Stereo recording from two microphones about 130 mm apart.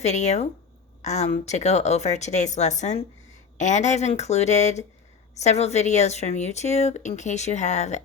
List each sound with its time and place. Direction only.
0.0 s speech: 60° left (ahead or behind)